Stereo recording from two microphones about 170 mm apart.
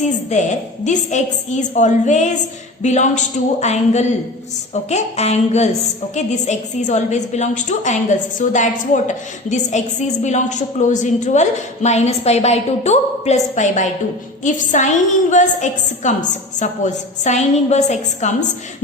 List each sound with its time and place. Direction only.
0.3 s a woman's voice: 45° left (ahead or behind)